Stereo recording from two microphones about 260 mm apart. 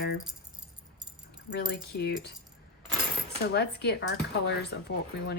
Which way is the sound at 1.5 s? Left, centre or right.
Left.